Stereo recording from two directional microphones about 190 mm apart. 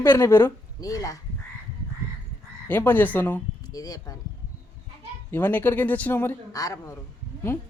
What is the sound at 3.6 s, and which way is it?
Speech, 20° left (ahead or behind).